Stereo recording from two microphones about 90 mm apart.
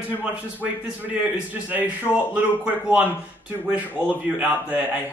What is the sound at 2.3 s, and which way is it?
Speech, 15° right (ahead or behind).